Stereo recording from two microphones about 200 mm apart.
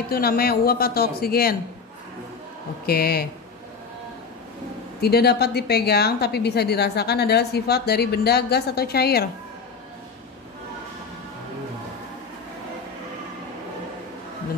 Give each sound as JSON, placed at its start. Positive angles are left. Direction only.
{"t": 0.1, "sound": "a woman's voice", "side_deg": 50}
{"t": 2.9, "sound": "a woman's voice", "side_deg": 50}
{"t": 5.0, "sound": "a woman's voice", "side_deg": 50}